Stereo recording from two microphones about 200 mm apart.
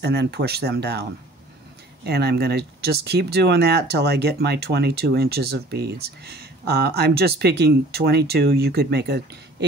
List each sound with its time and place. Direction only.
0.0 s speech: 55° right (ahead or behind)
2.0 s speech: 55° right (ahead or behind)